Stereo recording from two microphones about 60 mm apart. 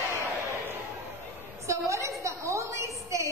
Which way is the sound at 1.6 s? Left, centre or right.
Right.